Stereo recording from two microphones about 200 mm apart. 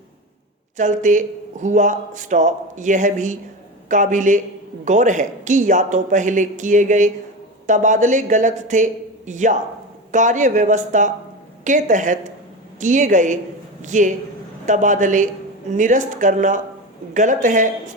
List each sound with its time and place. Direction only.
0.8 s speech: 40° right (ahead or behind)